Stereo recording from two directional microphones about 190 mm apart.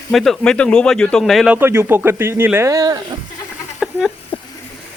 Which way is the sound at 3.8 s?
5° right (ahead or behind).